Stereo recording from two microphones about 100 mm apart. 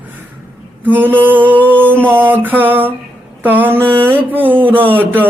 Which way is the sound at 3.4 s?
20° right (ahead or behind).